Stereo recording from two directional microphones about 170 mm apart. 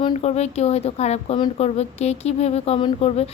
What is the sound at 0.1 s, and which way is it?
A woman's voice, 40° left (ahead or behind).